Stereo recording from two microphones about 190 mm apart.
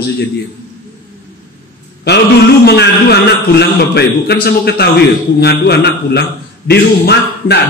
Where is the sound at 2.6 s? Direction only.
60° left (ahead or behind).